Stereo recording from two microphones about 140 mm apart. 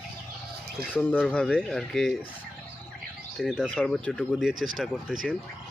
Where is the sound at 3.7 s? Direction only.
5° left (ahead or behind).